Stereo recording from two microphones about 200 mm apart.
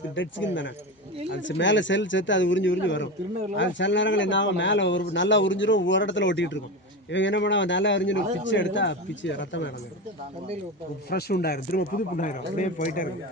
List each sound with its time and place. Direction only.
0.2 s speech: 65° left (ahead or behind)
11.1 s speech: 50° left (ahead or behind)